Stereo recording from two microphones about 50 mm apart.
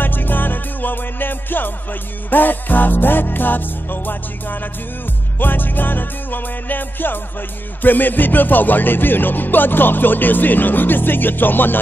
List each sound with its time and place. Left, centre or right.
0.0 s music: left